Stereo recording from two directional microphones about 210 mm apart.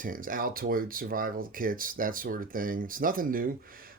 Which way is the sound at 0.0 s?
40° right (ahead or behind).